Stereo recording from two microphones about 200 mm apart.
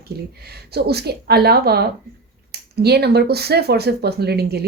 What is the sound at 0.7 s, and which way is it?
Speech, 55° right (ahead or behind).